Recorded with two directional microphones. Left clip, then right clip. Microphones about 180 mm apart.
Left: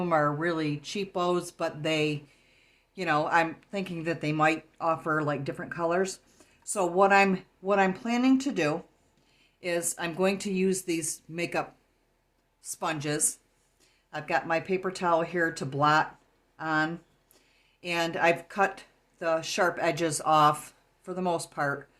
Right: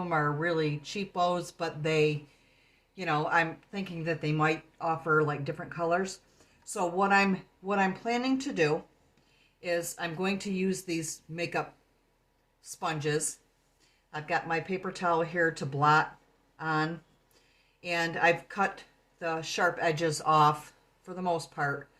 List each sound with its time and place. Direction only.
0.0 s speech: 55° left (ahead or behind)
12.6 s speech: 55° left (ahead or behind)